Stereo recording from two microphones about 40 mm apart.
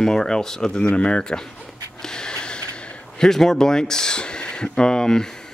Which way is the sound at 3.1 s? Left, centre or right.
Centre.